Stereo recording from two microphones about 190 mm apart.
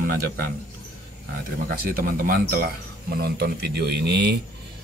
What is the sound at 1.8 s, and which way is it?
Speech, 50° right (ahead or behind).